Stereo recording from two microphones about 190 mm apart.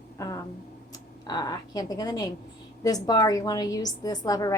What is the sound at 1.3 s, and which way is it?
A woman's voice, 20° left (ahead or behind).